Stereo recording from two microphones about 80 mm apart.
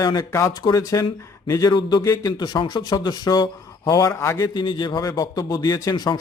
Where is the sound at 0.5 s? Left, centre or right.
Left.